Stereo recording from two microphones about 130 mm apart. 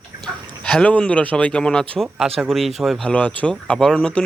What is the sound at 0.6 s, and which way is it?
Speech, 5° left (ahead or behind).